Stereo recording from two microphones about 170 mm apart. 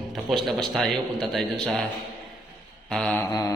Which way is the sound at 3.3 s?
20° left (ahead or behind).